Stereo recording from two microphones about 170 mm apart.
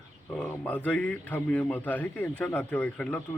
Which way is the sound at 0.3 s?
10° left (ahead or behind).